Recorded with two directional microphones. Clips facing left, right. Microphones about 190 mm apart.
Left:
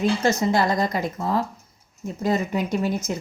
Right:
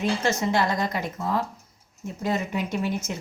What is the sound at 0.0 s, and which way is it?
Speech, 35° left (ahead or behind).